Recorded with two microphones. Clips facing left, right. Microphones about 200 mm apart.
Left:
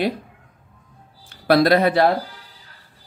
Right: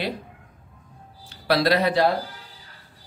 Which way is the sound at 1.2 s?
50° left (ahead or behind).